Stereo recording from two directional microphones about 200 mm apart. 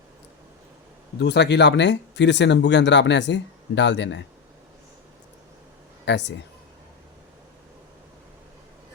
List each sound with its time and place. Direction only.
1.2 s speech: 60° left (ahead or behind)
6.1 s speech: 60° left (ahead or behind)